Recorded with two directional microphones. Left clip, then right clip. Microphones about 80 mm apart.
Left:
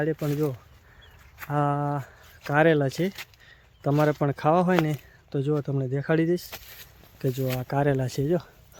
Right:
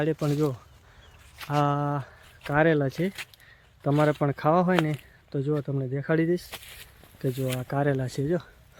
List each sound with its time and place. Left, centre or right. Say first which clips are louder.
0.2 s speech: right 1 dB; centre
4.7 s speech: left 1 dB; left
7.2 s speech: left 1 dB; left